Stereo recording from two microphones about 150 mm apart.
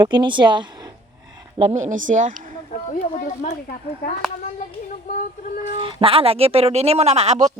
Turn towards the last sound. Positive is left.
turn(degrees=-45)  # may be behind; listen again after turning